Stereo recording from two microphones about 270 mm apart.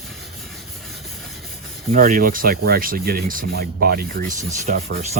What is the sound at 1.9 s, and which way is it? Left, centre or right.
Speech, right.